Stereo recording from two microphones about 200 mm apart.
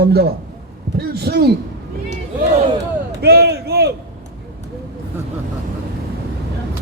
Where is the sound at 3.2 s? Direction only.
55° right (ahead or behind).